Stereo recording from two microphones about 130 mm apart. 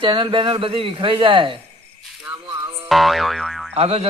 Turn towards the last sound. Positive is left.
turn(degrees=-50)  # may be behind; listen again after turning